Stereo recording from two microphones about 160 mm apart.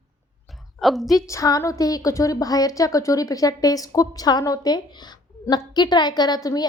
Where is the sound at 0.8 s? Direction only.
Centre (ahead or behind).